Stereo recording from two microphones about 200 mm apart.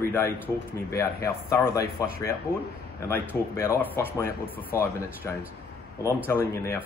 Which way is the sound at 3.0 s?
10° left (ahead or behind).